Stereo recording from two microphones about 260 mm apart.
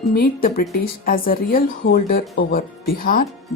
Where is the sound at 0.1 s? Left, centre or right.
Left.